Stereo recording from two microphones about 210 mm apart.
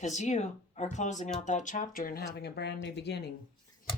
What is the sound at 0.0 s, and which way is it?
Speech, 35° left (ahead or behind).